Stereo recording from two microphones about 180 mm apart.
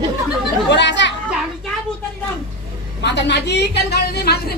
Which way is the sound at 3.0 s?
75° left (ahead or behind).